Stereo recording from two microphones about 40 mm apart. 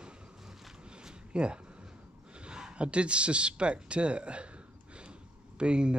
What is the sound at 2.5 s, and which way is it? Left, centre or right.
Speech, right.